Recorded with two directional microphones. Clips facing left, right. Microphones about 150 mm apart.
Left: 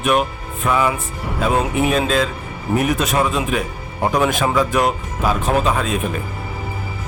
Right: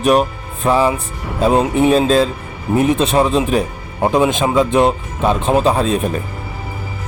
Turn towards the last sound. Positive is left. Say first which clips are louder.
# right 4 dB
turn(degrees=-35)  # may be behind; listen again after turning